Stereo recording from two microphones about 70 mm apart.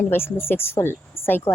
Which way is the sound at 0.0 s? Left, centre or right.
Left.